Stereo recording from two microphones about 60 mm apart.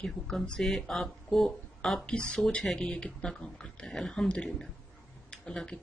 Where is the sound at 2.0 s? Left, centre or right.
Centre.